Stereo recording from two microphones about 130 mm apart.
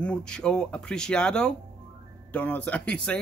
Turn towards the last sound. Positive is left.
turn(degrees=10)  # may be behind; listen again after turning